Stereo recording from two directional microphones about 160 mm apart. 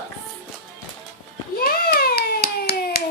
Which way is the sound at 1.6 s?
70° left (ahead or behind).